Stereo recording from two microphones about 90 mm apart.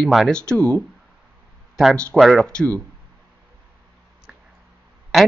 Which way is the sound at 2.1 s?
Centre (ahead or behind).